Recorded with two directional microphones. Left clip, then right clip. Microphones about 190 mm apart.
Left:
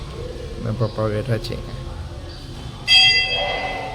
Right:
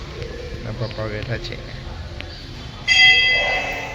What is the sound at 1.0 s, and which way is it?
Speech, 60° left (ahead or behind).